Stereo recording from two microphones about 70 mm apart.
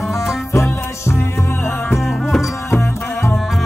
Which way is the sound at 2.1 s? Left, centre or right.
Centre.